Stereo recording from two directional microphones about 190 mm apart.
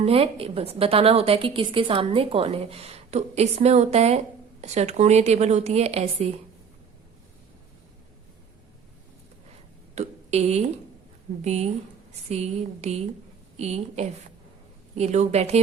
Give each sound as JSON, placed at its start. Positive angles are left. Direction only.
{"t": 0.0, "sound": "a woman's voice", "side_deg": -30}
{"t": 9.9, "sound": "a woman's voice", "side_deg": -35}